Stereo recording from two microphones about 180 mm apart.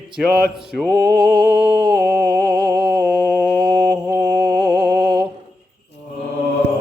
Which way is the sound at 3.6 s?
5° right (ahead or behind).